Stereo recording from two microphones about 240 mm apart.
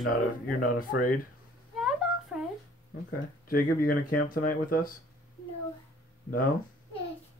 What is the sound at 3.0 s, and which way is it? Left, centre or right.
Speech, left.